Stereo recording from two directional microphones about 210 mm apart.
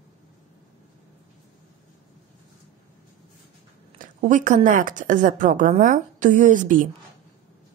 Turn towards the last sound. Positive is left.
turn(degrees=-40)  # may be behind; listen again after turning